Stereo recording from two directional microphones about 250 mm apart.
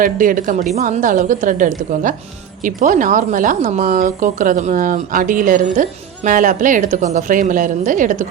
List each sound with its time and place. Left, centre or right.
0.0 s speech: right